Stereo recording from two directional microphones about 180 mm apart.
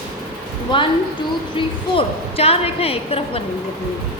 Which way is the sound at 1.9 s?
35° left (ahead or behind).